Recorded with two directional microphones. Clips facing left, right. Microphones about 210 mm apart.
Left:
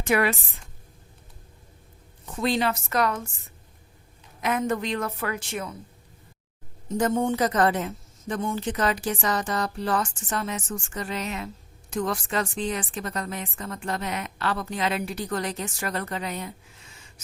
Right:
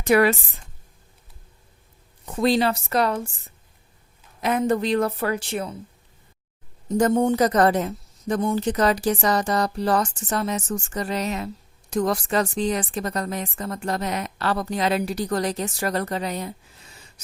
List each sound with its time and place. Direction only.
0.0 s a woman's voice: 40° right (ahead or behind)
2.2 s a woman's voice: 40° right (ahead or behind)
4.4 s a woman's voice: 35° right (ahead or behind)
6.8 s a woman's voice: 40° right (ahead or behind)